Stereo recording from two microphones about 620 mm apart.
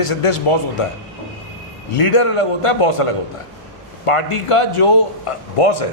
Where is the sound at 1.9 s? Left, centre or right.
Left.